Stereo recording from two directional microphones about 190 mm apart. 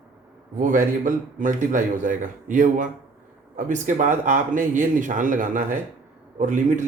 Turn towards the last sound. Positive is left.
turn(degrees=-40)  # may be behind; listen again after turning